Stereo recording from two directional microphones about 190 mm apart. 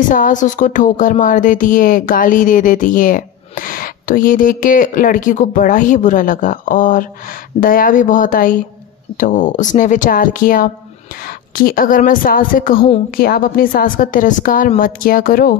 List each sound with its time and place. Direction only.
0.1 s speech: 45° left (ahead or behind)